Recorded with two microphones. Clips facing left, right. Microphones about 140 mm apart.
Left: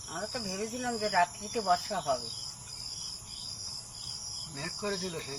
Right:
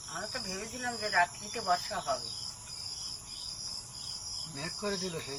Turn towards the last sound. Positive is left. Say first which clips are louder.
# even
turn(degrees=0)  # may be behind; listen again after turning